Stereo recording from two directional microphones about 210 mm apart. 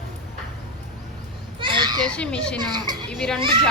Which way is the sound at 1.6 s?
25° right (ahead or behind).